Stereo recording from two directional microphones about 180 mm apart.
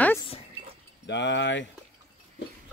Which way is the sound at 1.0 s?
75° left (ahead or behind).